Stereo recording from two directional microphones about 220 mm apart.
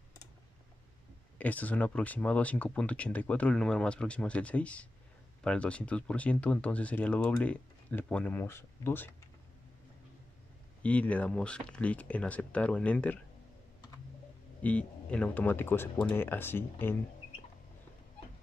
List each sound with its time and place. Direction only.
1.4 s speech: 5° left (ahead or behind)
10.8 s speech: 5° left (ahead or behind)
14.6 s speech: 5° left (ahead or behind)